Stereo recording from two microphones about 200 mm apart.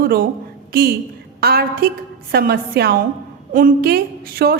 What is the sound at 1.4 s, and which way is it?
A woman's voice, 50° right (ahead or behind).